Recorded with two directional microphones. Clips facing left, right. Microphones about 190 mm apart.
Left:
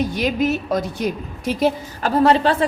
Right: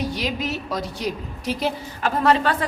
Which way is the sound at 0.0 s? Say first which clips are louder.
Left 6 dB; 50° left (ahead or behind).